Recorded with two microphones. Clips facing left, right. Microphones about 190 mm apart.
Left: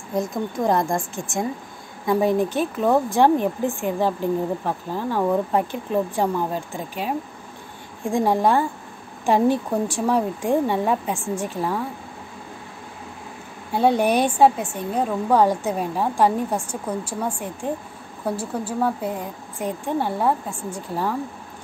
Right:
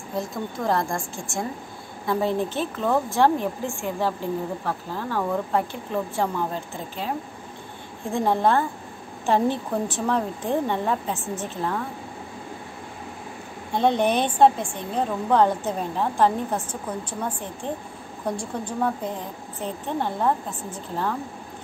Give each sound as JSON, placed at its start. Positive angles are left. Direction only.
{"t": 0.1, "sound": "a woman's voice", "side_deg": 20}
{"t": 13.7, "sound": "a woman's voice", "side_deg": 10}